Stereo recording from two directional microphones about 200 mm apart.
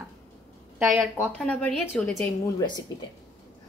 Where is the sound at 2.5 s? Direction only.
20° left (ahead or behind).